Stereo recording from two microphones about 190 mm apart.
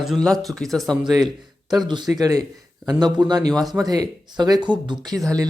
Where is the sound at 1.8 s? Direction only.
25° right (ahead or behind).